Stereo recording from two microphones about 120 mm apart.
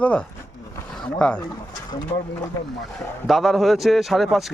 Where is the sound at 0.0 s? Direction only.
10° left (ahead or behind).